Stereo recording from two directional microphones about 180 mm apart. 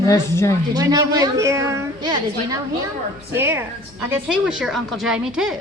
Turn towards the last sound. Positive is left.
turn(degrees=-5)  # may be behind; listen again after turning